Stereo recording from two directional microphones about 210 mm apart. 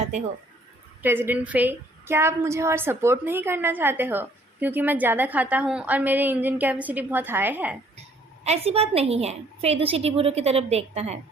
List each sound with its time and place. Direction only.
1.0 s a woman's voice: 10° right (ahead or behind)
8.4 s a woman's voice: 30° right (ahead or behind)